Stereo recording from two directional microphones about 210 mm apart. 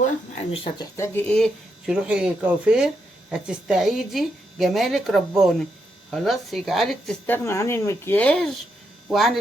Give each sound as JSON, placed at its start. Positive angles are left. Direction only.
{"t": 0.5, "sound": "speech", "side_deg": 25}
{"t": 0.9, "sound": "speech", "side_deg": 10}
{"t": 1.9, "sound": "speech", "side_deg": -5}